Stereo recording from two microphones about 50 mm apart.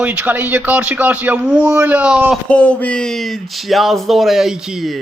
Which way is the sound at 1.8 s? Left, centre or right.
Right.